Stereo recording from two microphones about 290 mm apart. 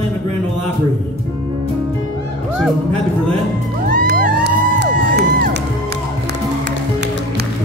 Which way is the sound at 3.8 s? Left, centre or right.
Right.